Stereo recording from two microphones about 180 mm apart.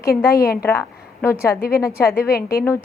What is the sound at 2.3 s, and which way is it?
Speech, 55° left (ahead or behind).